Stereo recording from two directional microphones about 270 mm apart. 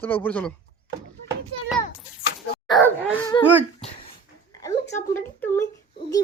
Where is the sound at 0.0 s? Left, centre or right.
Centre.